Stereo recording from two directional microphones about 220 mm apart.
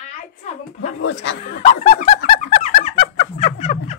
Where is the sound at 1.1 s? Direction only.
55° left (ahead or behind).